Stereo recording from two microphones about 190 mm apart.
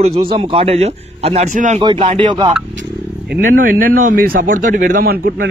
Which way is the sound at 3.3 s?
50° right (ahead or behind).